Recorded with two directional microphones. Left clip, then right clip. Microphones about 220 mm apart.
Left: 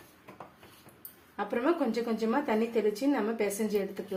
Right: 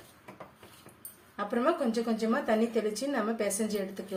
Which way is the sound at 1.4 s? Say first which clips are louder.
Even; 20° left (ahead or behind).